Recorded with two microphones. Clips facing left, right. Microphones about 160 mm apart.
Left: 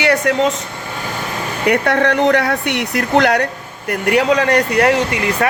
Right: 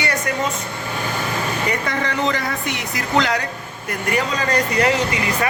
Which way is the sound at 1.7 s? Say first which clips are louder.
Left 14 dB; 65° left (ahead or behind).